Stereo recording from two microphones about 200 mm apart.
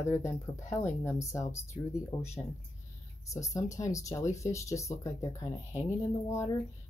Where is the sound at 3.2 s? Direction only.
15° left (ahead or behind).